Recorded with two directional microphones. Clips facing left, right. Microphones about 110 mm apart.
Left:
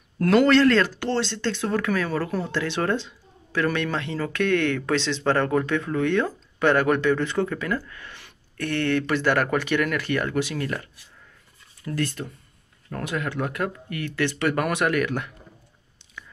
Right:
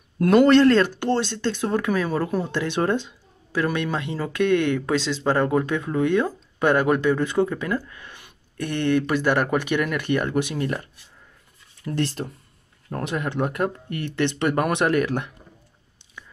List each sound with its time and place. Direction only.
0.2 s speech: 20° right (ahead or behind)